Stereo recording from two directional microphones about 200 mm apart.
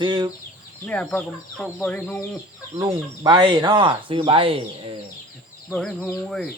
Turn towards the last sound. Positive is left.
turn(degrees=5)  # may be behind; listen again after turning